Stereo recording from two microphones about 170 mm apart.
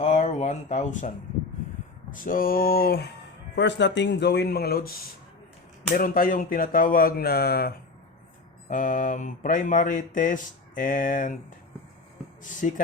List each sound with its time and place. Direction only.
0.0 s speech: 40° left (ahead or behind)
2.2 s speech: 55° left (ahead or behind)
3.5 s speech: 90° left; by 7.8 s 65° left (ahead or behind)
8.7 s speech: 50° left (ahead or behind)
12.4 s speech: 50° left (ahead or behind)